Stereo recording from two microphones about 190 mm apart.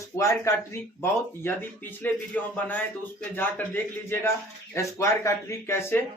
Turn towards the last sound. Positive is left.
turn(degrees=15)  # may be behind; listen again after turning